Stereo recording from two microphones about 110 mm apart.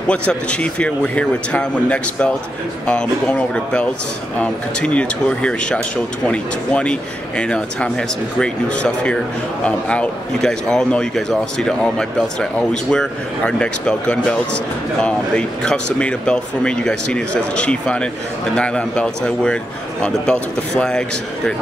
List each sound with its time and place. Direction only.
0.1 s a man's voice: 10° left (ahead or behind)